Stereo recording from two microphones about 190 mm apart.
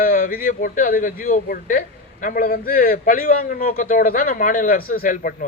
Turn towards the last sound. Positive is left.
turn(degrees=45)  # may be behind; listen again after turning